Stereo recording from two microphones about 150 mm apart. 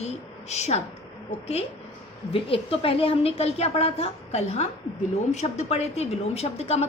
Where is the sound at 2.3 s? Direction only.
40° left (ahead or behind).